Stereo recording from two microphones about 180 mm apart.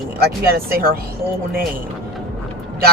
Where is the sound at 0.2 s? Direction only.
55° right (ahead or behind).